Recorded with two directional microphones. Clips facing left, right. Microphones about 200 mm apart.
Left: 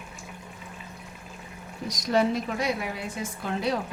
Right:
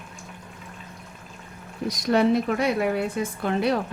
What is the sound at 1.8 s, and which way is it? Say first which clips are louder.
A woman's voice: right 4 dB; 60° right (ahead or behind).